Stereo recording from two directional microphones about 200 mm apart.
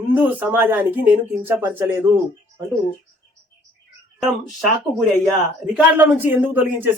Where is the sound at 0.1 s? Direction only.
10° right (ahead or behind).